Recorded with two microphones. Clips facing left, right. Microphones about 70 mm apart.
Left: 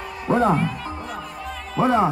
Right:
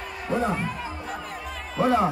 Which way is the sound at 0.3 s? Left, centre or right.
Left.